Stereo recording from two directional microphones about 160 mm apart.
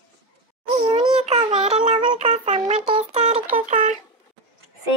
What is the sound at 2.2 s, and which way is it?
Speech, 50° right (ahead or behind).